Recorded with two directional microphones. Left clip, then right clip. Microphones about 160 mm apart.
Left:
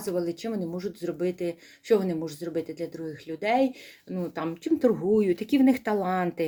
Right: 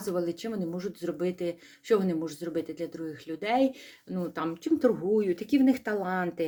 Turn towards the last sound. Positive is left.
turn(degrees=20)  # may be behind; listen again after turning